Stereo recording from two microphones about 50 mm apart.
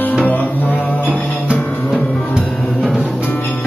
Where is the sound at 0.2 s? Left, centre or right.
Left.